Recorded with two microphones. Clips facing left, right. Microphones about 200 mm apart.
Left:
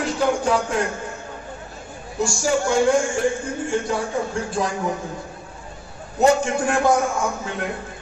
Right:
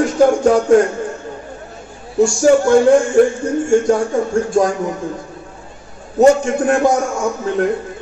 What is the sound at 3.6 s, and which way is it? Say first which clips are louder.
A man's voice: right 10 dB; 45° right (ahead or behind).